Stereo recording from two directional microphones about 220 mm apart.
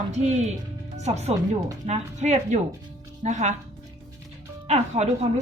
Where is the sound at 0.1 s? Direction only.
30° right (ahead or behind).